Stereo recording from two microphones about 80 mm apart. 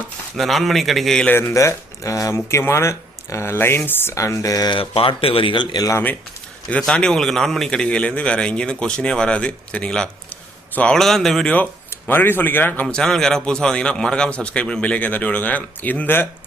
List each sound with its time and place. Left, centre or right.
0.3 s a man's voice: centre
1.5 s speech: left
4.1 s speech: left
5.4 s speech: left
6.7 s a man's voice: centre
11.9 s a man's voice: left
12.8 s a man's voice: centre